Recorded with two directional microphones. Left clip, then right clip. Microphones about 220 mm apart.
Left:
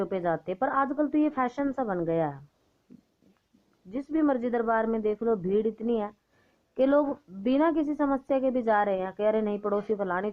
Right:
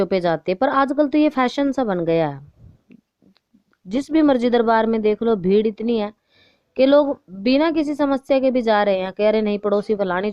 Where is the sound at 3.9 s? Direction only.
55° right (ahead or behind).